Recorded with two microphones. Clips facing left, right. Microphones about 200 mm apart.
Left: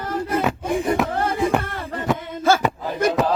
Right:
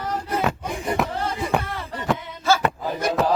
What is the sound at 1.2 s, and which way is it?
Music, 55° left (ahead or behind).